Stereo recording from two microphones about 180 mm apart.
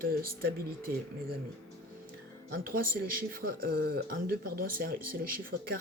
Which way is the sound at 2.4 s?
55° right (ahead or behind).